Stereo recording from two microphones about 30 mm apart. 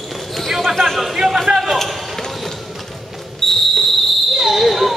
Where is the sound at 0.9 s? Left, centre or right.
Centre.